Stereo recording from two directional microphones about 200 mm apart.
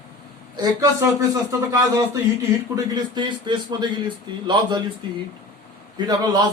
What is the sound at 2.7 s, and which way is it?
A man's voice, 20° right (ahead or behind).